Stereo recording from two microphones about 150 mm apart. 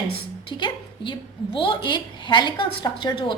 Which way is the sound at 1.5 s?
35° left (ahead or behind).